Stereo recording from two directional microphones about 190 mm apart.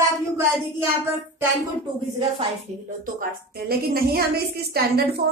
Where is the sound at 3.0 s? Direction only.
55° right (ahead or behind).